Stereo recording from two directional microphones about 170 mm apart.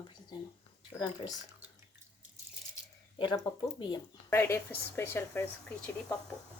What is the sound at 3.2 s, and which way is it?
Speech, 25° left (ahead or behind).